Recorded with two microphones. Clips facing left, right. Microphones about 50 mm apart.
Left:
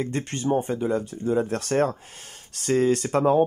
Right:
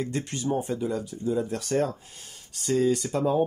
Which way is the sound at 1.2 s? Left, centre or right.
Left.